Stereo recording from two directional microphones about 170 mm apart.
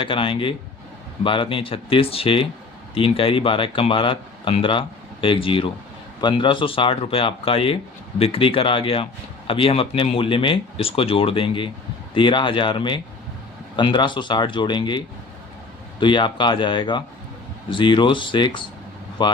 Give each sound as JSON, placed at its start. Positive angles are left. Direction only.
{"t": 0.0, "sound": "speech", "side_deg": 30}